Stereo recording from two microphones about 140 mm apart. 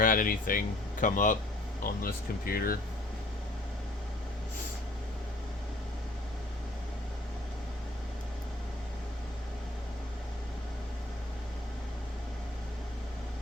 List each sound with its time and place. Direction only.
0.0 s speech: 85° left; by 1.4 s 70° left (ahead or behind)
1.8 s speech: 90° left